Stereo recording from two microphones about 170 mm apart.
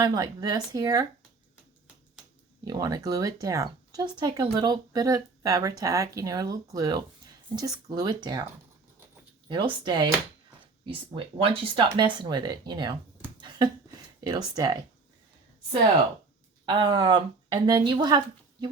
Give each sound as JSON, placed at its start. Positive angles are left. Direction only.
{"t": 0.0, "sound": "speech", "side_deg": -20}
{"t": 2.6, "sound": "speech", "side_deg": -20}
{"t": 9.5, "sound": "speech", "side_deg": -30}
{"t": 13.4, "sound": "a sound", "side_deg": -25}
{"t": 14.3, "sound": "speech", "side_deg": -25}
{"t": 16.6, "sound": "speech", "side_deg": -30}